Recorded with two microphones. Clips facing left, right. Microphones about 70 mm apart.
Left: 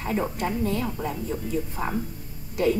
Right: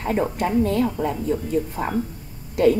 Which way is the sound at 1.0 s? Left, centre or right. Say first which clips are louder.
Right 6 dB; right.